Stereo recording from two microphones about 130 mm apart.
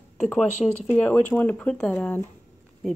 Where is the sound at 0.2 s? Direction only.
5° left (ahead or behind).